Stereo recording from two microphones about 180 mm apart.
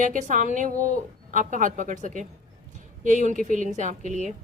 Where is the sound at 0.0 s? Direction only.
45° right (ahead or behind).